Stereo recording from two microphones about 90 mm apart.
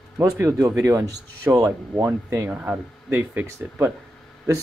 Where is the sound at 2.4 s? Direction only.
15° right (ahead or behind).